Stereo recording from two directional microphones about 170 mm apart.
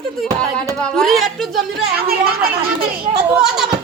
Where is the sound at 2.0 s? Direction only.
65° right (ahead or behind).